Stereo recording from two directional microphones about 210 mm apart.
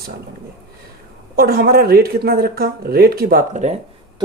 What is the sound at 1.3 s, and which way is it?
Speech, 45° right (ahead or behind).